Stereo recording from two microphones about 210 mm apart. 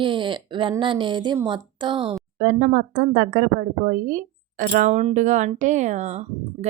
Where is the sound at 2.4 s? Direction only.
40° right (ahead or behind).